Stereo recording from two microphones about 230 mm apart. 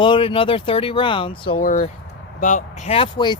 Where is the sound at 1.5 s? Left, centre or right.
Left; by 3.4 s centre.